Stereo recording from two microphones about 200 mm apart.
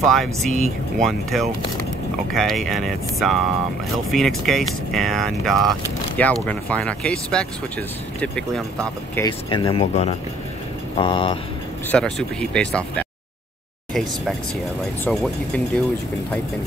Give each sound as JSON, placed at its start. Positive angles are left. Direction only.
{"t": 0.0, "sound": "speech", "side_deg": 0}
{"t": 9.2, "sound": "speech", "side_deg": 20}
{"t": 11.9, "sound": "speech", "side_deg": 5}
{"t": 15.0, "sound": "speech", "side_deg": 5}